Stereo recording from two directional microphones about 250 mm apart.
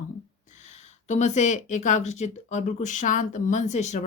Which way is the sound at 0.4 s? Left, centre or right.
Left.